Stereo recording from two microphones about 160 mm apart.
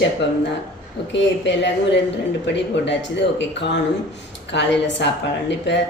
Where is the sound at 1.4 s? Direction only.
90° left.